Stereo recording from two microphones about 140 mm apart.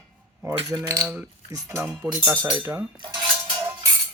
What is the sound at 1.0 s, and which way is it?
Speech, 10° right (ahead or behind).